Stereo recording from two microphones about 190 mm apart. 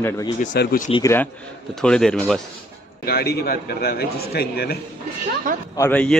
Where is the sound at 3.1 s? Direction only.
55° left (ahead or behind).